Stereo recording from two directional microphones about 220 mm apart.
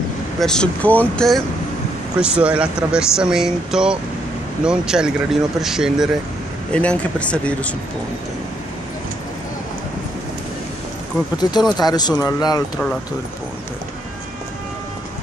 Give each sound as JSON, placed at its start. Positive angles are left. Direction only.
{"t": 0.4, "sound": "speech", "side_deg": 5}
{"t": 11.8, "sound": "speech", "side_deg": 15}